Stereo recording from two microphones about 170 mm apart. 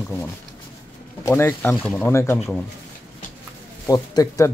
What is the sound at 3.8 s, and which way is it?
Speech, 20° left (ahead or behind).